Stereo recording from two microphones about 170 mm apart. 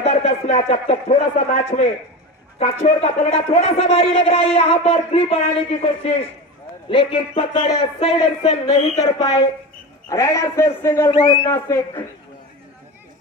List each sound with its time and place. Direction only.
0.0 s a man's voice: 40° left (ahead or behind)
8.9 s a man's voice: 20° left (ahead or behind)
11.1 s a man's voice: 30° left (ahead or behind)
11.7 s speech: 15° left (ahead or behind)